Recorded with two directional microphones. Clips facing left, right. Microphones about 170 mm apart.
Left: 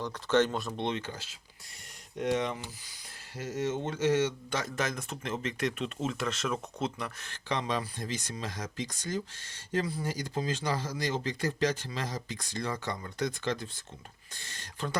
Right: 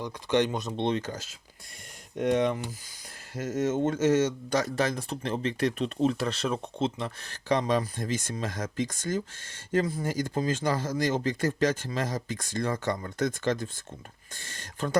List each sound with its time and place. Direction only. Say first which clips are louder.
0.0 s speech: right 1 dB; 15° right (ahead or behind)
0.8 s speech: right 5 dB; 35° right (ahead or behind)
7.3 s speech: right 7 dB; 40° right (ahead or behind)